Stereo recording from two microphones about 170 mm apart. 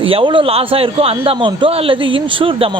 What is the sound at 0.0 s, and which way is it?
A man's voice, 35° right (ahead or behind).